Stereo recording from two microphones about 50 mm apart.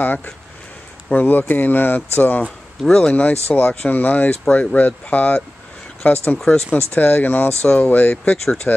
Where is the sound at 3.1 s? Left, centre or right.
Left.